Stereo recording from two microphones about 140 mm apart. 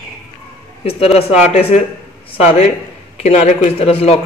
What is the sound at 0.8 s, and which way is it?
Speech, 45° left (ahead or behind).